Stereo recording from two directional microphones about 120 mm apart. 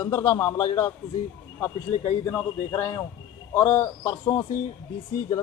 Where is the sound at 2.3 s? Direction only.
20° left (ahead or behind).